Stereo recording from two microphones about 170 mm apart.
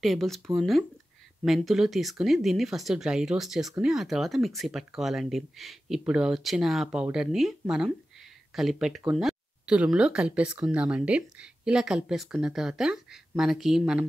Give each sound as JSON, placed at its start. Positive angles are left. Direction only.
{"t": 0.0, "sound": "speech", "side_deg": 0}